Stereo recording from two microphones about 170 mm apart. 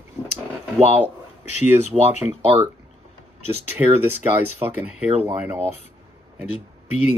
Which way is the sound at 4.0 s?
10° right (ahead or behind).